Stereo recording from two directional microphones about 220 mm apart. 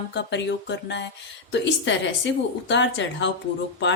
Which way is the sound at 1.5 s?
55° left (ahead or behind).